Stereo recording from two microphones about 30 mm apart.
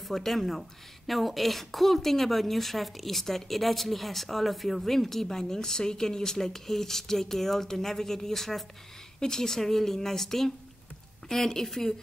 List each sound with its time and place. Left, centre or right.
0.1 s a woman's voice: centre